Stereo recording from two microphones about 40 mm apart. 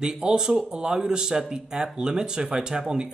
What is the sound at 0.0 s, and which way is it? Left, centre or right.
Speech, right.